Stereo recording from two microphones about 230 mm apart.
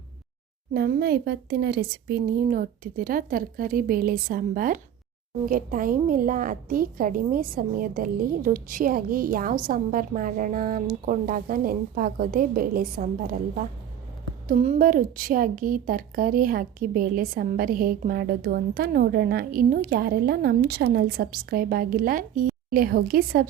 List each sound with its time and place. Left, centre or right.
0.7 s a woman's voice: right